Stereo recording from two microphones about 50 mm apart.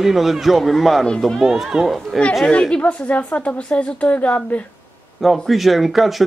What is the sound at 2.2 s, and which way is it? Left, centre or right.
Speech, centre.